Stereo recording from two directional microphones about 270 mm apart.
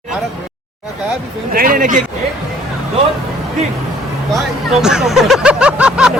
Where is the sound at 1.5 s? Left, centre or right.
Right.